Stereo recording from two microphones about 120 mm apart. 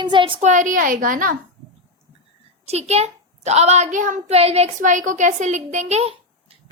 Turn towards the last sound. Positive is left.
turn(degrees=-65)  # may be behind; listen again after turning